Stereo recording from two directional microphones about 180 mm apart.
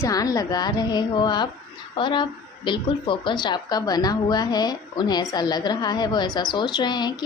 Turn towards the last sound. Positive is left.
turn(degrees=25)  # may be behind; listen again after turning